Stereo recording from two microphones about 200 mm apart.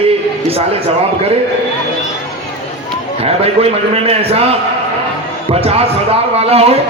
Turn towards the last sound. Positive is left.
turn(degrees=-30)  # may be behind; listen again after turning